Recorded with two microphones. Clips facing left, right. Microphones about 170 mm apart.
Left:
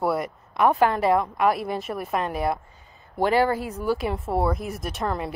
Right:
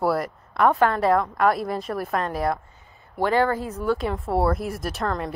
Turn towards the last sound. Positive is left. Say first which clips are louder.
# right 1 dB
turn(degrees=10)  # may be behind; listen again after turning